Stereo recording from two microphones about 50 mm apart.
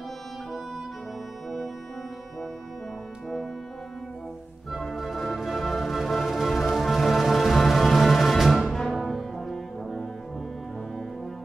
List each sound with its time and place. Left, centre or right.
4.7 s music: centre
8.9 s brass instrument: centre